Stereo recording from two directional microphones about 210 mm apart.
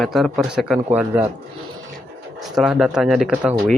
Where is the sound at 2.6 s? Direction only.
Centre (ahead or behind).